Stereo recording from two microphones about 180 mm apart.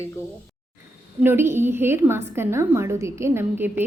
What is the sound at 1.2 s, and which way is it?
A woman's voice, 15° right (ahead or behind).